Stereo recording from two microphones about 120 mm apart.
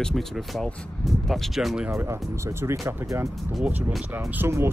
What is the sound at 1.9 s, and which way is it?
Speech, 25° right (ahead or behind).